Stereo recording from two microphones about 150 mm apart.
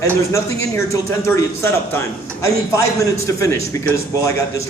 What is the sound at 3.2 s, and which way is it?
A man's voice, 20° left (ahead or behind).